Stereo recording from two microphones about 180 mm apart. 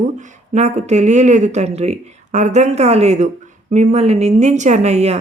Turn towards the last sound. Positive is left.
turn(degrees=-35)  # may be behind; listen again after turning